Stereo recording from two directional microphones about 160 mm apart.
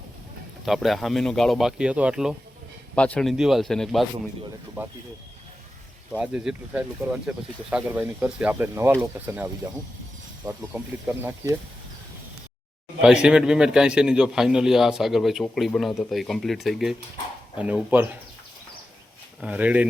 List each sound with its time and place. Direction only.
0.6 s a man's voice: centre (ahead or behind)
2.9 s a man's voice: 10° left (ahead or behind)
6.1 s speech: 5° right (ahead or behind)
13.2 s a man's voice: 5° right (ahead or behind)
19.4 s speech: 10° right (ahead or behind)